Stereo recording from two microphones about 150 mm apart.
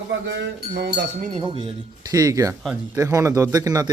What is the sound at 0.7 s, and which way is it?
Speech, 75° right (ahead or behind).